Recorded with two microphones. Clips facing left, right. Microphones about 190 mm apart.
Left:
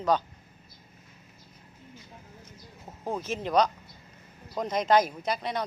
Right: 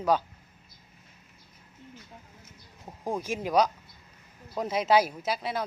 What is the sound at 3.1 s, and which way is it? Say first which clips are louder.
Speech: right 1 dB; 10° right (ahead or behind).